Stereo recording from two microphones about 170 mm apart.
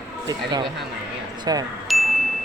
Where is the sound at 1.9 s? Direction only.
Centre (ahead or behind).